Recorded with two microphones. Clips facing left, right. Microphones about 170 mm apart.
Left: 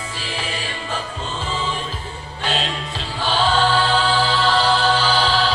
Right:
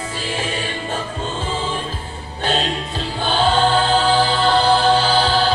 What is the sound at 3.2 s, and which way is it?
Choir, 50° right (ahead or behind).